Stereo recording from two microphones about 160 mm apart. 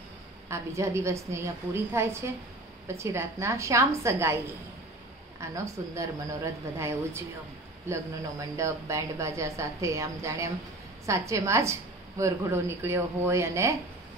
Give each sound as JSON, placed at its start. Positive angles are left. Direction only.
{"t": 0.5, "sound": "a woman's voice", "side_deg": -15}
{"t": 5.4, "sound": "a woman's voice", "side_deg": -20}
{"t": 8.5, "sound": "a woman's voice", "side_deg": -20}